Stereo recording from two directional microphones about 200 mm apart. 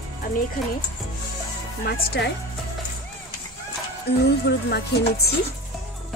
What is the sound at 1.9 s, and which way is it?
Speech, 60° left (ahead or behind).